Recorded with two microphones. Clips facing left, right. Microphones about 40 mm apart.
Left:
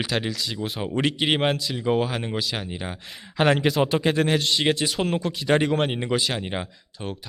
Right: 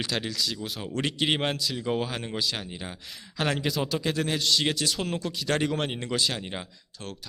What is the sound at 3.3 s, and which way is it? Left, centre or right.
Speech, left.